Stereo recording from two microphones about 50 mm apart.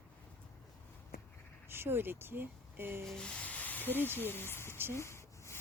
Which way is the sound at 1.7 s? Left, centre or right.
Right.